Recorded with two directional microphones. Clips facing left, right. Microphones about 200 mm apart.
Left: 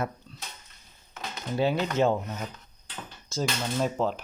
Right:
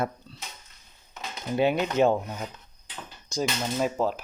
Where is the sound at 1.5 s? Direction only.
20° right (ahead or behind).